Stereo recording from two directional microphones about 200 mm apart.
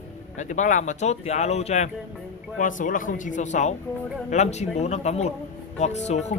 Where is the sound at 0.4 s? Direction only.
40° left (ahead or behind).